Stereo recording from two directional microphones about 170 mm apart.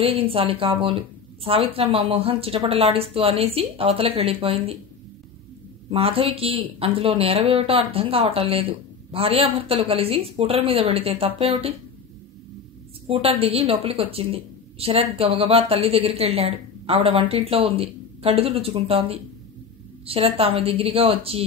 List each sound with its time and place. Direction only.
0.0 s a woman's voice: 35° right (ahead or behind)
5.9 s a woman's voice: 35° right (ahead or behind)
13.0 s a woman's voice: 35° right (ahead or behind)